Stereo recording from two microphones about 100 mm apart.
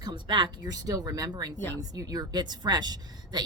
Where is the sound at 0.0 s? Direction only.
50° right (ahead or behind).